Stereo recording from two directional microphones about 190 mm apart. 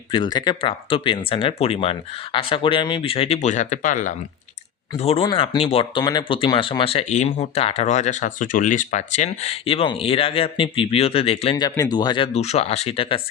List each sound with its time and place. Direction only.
0.1 s speech: 25° left (ahead or behind); by 4.1 s 40° left (ahead or behind)
4.9 s speech: 30° left (ahead or behind)